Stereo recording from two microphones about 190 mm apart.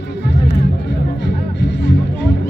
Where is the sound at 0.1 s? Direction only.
65° left (ahead or behind).